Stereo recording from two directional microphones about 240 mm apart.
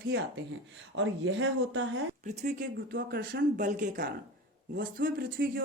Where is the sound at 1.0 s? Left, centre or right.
Right.